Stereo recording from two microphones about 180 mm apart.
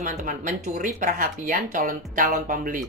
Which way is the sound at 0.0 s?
45° right (ahead or behind).